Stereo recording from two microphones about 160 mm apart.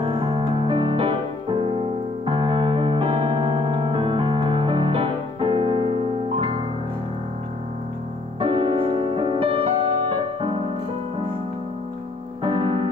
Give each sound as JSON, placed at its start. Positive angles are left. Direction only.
{"t": 0.0, "sound": "music", "side_deg": -35}
{"t": 8.4, "sound": "music", "side_deg": -35}
{"t": 12.4, "sound": "music", "side_deg": -30}